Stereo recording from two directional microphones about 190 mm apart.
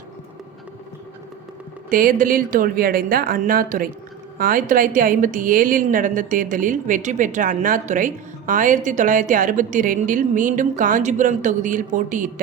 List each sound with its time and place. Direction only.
1.9 s a woman's voice: 45° right (ahead or behind)